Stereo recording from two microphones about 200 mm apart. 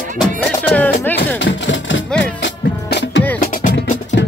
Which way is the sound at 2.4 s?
65° left (ahead or behind).